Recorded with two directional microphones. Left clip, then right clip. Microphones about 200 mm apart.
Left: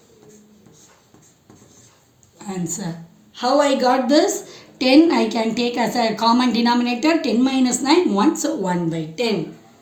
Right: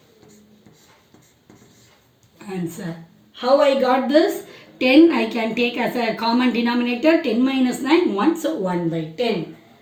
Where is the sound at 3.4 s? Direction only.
45° left (ahead or behind).